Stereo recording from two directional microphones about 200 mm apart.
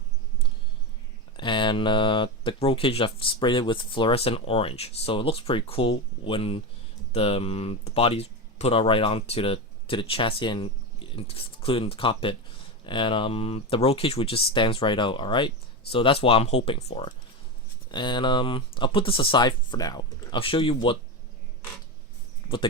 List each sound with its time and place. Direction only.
1.4 s speech: 25° left (ahead or behind)